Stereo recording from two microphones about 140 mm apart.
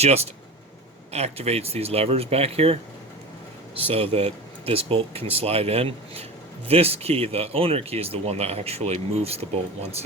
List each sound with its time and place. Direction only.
0.0 s speech: 50° right (ahead or behind)
3.8 s speech: 45° right (ahead or behind)